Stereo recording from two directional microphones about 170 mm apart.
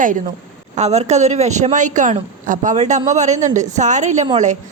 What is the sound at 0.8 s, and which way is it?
Speech, 40° right (ahead or behind).